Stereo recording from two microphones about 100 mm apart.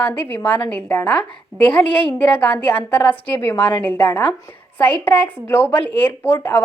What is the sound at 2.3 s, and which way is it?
A woman's voice, 15° left (ahead or behind).